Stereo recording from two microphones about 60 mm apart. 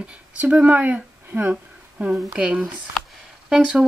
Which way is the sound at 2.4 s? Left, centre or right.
Centre.